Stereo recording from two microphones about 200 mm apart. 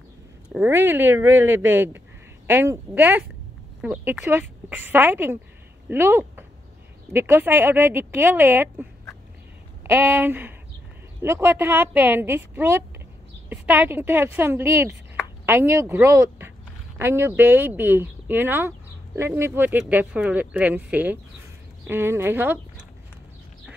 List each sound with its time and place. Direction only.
0.5 s speech: 10° right (ahead or behind)
9.8 s speech: 10° right (ahead or behind)